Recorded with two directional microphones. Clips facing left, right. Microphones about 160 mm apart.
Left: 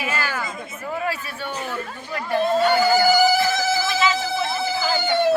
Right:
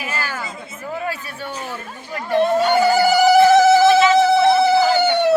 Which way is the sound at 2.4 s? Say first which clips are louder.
Right 3 dB; 70° right (ahead or behind).